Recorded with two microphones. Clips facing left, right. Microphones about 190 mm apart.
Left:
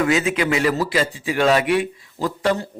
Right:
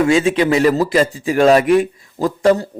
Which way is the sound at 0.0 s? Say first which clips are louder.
Right 5 dB; 30° right (ahead or behind).